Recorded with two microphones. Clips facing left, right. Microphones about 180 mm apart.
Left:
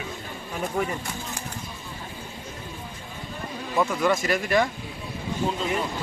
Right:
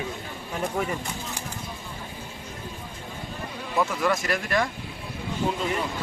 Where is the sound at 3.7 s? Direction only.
Centre (ahead or behind).